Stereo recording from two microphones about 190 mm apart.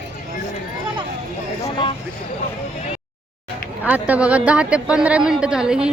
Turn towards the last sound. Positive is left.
turn(degrees=-5)  # may be behind; listen again after turning